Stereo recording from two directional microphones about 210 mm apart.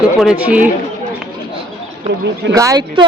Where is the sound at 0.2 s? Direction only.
5° right (ahead or behind).